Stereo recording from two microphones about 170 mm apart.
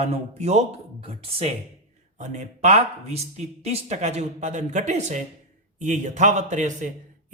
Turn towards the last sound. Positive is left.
turn(degrees=-45)  # may be behind; listen again after turning